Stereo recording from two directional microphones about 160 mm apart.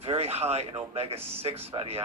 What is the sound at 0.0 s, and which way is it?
Speech, 40° right (ahead or behind).